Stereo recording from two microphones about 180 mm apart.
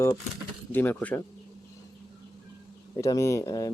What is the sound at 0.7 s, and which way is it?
Speech, 10° left (ahead or behind).